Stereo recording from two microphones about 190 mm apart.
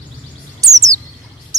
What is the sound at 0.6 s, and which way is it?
Chirp, 15° right (ahead or behind).